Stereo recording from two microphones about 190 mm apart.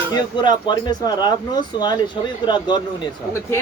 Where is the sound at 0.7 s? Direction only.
25° left (ahead or behind).